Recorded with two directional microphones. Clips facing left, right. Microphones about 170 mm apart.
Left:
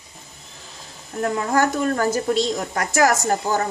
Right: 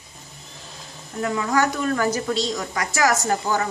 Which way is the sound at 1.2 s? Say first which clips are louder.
Left 1 dB; 45° left (ahead or behind).